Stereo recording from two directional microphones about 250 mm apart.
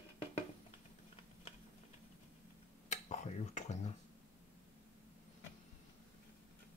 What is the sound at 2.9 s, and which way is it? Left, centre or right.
Tick-tock, left.